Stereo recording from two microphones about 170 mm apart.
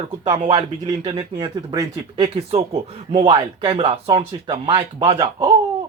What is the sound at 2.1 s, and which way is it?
Speech, 35° right (ahead or behind).